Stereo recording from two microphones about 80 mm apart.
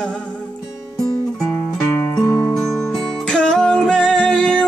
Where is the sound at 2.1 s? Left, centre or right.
Left.